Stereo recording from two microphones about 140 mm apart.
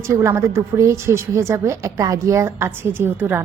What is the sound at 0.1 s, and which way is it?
A woman's voice, 20° right (ahead or behind).